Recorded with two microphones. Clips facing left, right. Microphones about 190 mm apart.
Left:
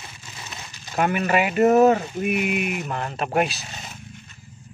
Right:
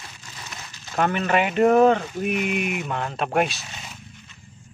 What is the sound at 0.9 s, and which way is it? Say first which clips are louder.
Speech: even; 10° left (ahead or behind).